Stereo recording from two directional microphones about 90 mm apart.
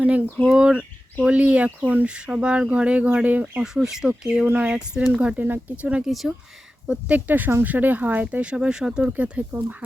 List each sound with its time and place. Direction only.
0.0 s speech: 15° right (ahead or behind)
3.6 s speech: 5° right (ahead or behind)
6.1 s speech: centre (ahead or behind)
6.8 s speech: 15° right (ahead or behind)